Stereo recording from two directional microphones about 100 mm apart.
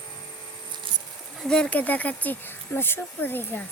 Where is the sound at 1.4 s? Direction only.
10° left (ahead or behind).